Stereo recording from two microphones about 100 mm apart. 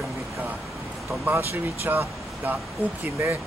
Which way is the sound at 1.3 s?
25° right (ahead or behind).